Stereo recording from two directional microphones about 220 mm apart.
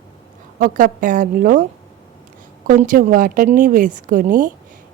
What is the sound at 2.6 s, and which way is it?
A woman's voice, 35° right (ahead or behind).